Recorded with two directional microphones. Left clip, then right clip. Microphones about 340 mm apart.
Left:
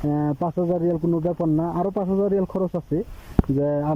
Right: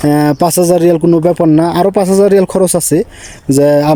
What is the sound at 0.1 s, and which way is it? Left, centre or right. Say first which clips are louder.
Speech: right 14 dB; right.